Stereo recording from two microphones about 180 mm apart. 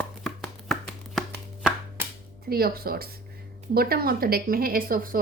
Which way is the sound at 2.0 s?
10° right (ahead or behind).